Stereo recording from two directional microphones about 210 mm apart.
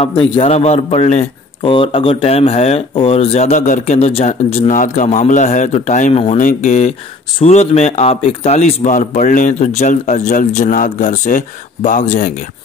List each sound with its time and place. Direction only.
0.0 s a man's voice: 25° left (ahead or behind)